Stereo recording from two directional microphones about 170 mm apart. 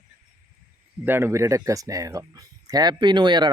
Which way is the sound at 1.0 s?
15° right (ahead or behind).